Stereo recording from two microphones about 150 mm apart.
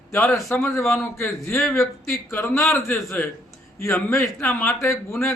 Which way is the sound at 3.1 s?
15° left (ahead or behind).